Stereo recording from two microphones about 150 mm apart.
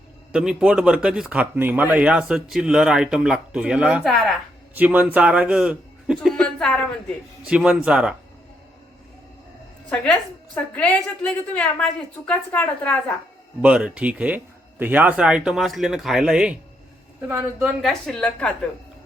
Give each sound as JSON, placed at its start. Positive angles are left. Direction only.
{"t": 0.3, "sound": "speech", "side_deg": -5}
{"t": 4.7, "sound": "a man's voice", "side_deg": -10}
{"t": 6.1, "sound": "speech", "side_deg": 5}
{"t": 7.4, "sound": "speech", "side_deg": -5}
{"t": 10.8, "sound": "a woman's voice", "side_deg": 10}
{"t": 13.6, "sound": "speech", "side_deg": -10}
{"t": 17.8, "sound": "a woman's voice", "side_deg": 5}